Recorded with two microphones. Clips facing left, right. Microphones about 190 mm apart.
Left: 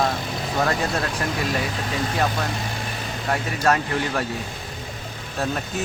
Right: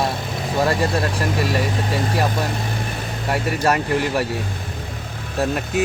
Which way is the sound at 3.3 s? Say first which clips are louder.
Right 2 dB; 10° right (ahead or behind).